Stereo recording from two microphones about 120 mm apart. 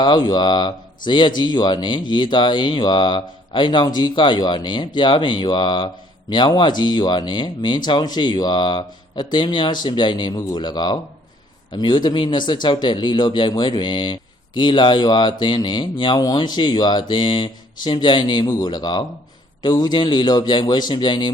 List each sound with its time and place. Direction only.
0.0 s a man's voice: 35° left (ahead or behind)